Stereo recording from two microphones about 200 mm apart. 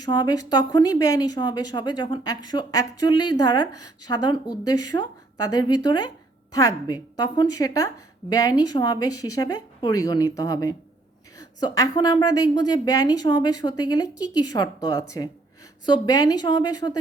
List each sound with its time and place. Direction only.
0.0 s a woman's voice: 20° left (ahead or behind)